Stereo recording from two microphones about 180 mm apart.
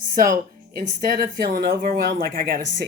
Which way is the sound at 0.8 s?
60° right (ahead or behind).